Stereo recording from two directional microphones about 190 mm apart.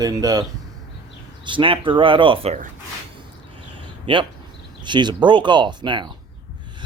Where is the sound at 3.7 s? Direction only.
25° right (ahead or behind).